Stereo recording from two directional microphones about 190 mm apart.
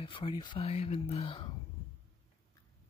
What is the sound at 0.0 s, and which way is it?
Speech, 25° left (ahead or behind).